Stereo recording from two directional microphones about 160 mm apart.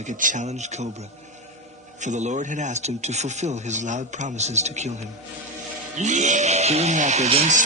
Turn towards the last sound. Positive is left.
turn(degrees=-45)  # may be behind; listen again after turning